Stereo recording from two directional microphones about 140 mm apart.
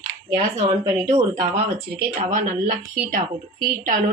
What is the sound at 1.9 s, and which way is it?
A woman's voice, 80° right.